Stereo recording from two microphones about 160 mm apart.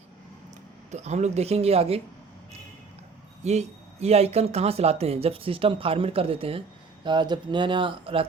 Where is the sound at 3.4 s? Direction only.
45° right (ahead or behind).